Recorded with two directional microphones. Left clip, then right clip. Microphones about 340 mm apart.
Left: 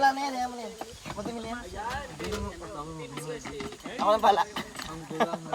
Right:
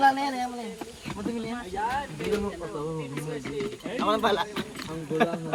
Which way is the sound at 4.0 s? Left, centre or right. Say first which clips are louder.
Left 2 dB; left.